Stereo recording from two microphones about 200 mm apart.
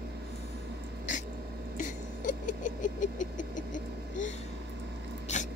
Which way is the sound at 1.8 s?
40° left (ahead or behind).